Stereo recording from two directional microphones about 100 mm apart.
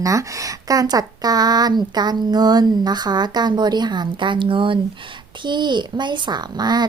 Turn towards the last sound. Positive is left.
turn(degrees=-45)  # may be behind; listen again after turning